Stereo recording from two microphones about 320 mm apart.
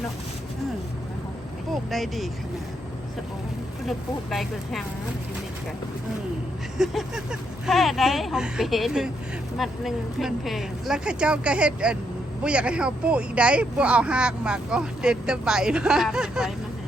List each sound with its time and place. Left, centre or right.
1.7 s speech: centre
3.8 s speech: centre
6.7 s speech: centre